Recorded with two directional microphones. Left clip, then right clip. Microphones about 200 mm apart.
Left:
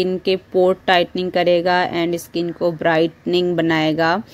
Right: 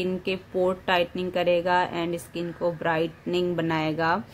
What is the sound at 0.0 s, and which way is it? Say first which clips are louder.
Speech: left 9 dB; 25° left (ahead or behind).